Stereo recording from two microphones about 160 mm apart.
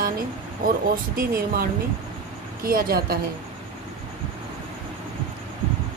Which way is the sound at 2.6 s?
65° right (ahead or behind).